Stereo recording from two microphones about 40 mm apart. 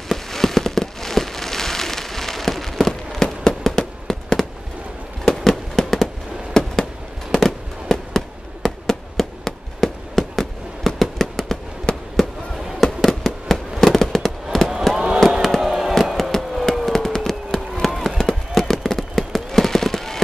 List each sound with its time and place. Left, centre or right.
0.1 s fireworks: centre
8.6 s a sound: centre
11.9 s fireworks: left
12.8 s fireworks: centre
15.6 s music: centre
15.9 s a sound: centre
18.5 s fireworks: centre